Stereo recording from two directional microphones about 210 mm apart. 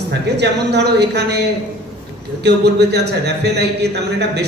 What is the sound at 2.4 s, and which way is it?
Speech, 50° right (ahead or behind).